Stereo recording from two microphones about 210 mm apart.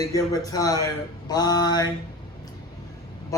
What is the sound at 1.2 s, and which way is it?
Mantra, 20° left (ahead or behind).